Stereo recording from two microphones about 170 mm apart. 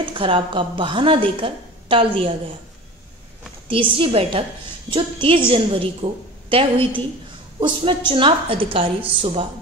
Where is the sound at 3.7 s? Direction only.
30° right (ahead or behind).